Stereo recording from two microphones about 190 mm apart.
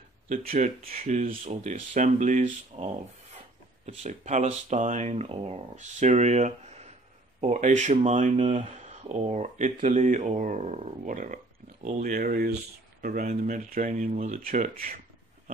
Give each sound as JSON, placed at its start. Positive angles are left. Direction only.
{"t": 0.3, "sound": "speech", "side_deg": -40}